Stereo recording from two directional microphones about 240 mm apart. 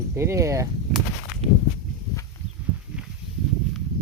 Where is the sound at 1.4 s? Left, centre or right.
Right.